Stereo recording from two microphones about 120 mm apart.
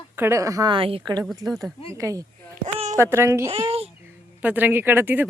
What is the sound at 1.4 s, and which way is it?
A woman's voice, 30° right (ahead or behind).